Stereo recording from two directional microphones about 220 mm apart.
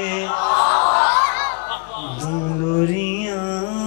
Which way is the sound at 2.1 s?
25° left (ahead or behind).